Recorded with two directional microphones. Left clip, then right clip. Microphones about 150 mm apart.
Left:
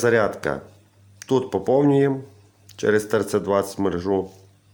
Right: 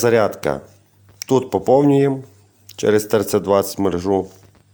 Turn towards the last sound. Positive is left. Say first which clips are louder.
# right 4 dB
turn(degrees=-25)  # may be behind; listen again after turning